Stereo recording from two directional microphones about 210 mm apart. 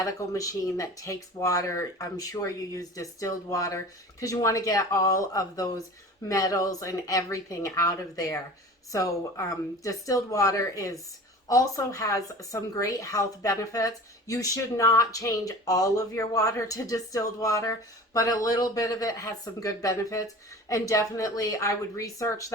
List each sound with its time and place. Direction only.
0.0 s a woman's voice: 15° left (ahead or behind)